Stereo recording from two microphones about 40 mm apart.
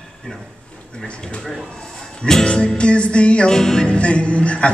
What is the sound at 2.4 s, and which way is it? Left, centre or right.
A man's voice, left.